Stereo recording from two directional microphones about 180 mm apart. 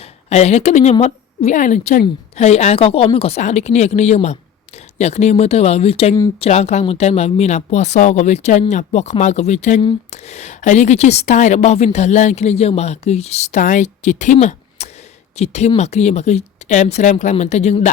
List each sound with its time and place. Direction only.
0.0 s a woman's voice: 35° left (ahead or behind)